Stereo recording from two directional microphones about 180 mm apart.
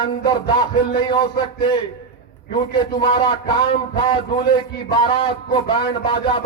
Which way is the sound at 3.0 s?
30° left (ahead or behind).